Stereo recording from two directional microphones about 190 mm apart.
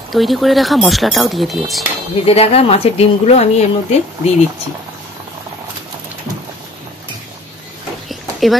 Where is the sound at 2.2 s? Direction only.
30° left (ahead or behind).